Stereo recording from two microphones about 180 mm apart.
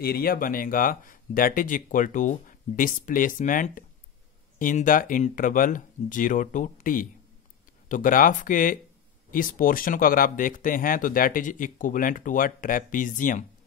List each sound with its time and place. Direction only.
0.0 s speech: 55° left (ahead or behind)